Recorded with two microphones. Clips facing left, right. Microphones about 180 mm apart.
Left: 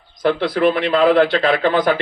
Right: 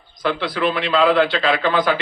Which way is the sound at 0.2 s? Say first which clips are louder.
Left 5 dB; 50° left (ahead or behind).